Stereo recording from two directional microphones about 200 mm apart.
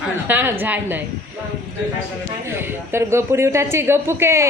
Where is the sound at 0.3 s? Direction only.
10° right (ahead or behind).